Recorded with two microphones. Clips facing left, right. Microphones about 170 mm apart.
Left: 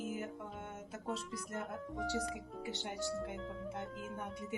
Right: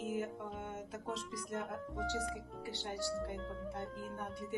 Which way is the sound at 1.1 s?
5° left (ahead or behind).